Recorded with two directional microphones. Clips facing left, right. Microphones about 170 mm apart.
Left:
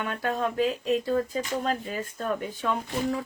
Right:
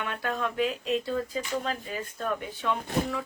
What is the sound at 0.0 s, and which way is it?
Speech, 40° left (ahead or behind).